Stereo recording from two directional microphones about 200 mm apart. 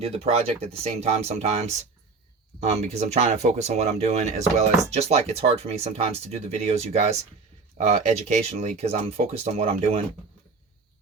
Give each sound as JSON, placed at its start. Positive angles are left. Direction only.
{"t": 0.0, "sound": "speech", "side_deg": -30}